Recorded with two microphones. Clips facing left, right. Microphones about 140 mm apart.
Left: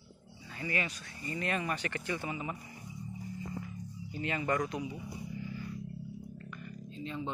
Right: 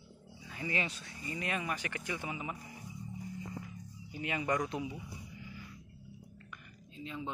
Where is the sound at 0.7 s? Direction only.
25° right (ahead or behind).